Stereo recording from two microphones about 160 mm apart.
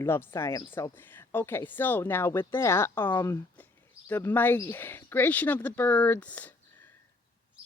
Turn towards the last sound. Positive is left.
turn(degrees=10)  # may be behind; listen again after turning